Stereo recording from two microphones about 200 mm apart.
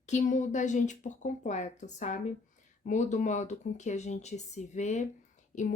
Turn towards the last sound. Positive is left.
turn(degrees=40)  # may be behind; listen again after turning